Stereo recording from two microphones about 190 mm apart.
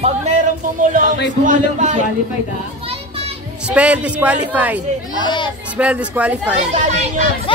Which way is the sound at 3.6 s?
5° right (ahead or behind).